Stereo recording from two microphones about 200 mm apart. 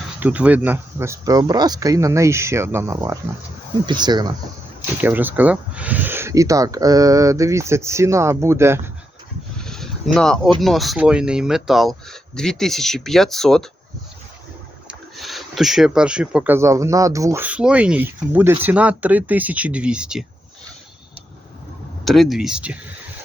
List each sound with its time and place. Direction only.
0.2 s speech: 5° right (ahead or behind)
4.9 s speech: 10° right (ahead or behind)
9.6 s a sound: centre (ahead or behind)
10.6 s speech: centre (ahead or behind)
14.8 s speech: centre (ahead or behind)
22.0 s speech: centre (ahead or behind)